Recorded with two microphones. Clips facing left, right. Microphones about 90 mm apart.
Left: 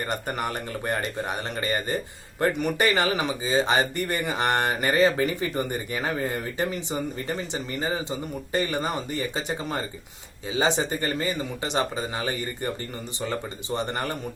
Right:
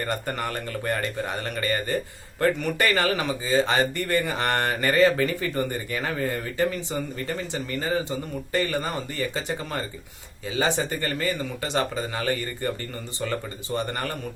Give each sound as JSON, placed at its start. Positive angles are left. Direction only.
{"t": 0.0, "sound": "speech", "side_deg": 20}